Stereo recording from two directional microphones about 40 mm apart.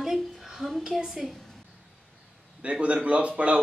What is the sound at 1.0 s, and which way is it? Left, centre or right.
Speech, centre.